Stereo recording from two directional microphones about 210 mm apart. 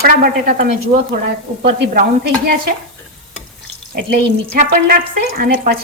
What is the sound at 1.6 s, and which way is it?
Speech, 50° right (ahead or behind).